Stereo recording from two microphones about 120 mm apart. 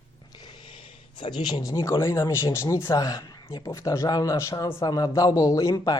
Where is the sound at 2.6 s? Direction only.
30° left (ahead or behind).